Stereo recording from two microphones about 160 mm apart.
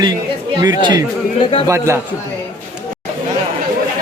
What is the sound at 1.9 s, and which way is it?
Speech, 20° right (ahead or behind).